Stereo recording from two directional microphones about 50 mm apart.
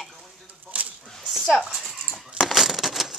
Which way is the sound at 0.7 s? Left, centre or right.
Right.